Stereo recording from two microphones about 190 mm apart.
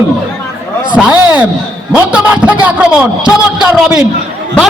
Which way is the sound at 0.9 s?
5° right (ahead or behind).